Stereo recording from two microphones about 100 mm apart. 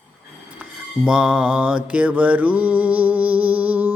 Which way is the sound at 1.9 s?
15° right (ahead or behind).